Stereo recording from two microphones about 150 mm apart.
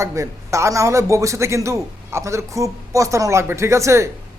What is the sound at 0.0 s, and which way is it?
A man's voice, 20° right (ahead or behind).